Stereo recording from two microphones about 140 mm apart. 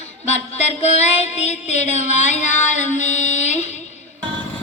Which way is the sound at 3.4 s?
55° left (ahead or behind).